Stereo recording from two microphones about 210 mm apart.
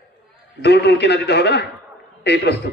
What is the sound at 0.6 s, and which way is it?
A man's voice, 50° left (ahead or behind).